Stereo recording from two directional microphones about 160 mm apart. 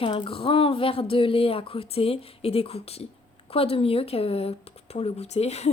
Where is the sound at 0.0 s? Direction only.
35° left (ahead or behind).